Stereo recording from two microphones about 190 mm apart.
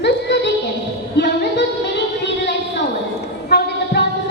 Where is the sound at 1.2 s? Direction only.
65° left (ahead or behind).